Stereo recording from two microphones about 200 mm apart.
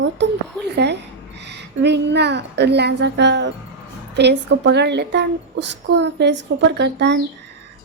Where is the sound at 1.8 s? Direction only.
60° right (ahead or behind).